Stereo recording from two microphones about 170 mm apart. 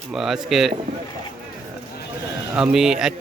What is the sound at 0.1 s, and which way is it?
Speech, centre (ahead or behind).